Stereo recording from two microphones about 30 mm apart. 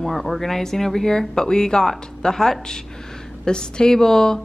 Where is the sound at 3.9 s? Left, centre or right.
Centre.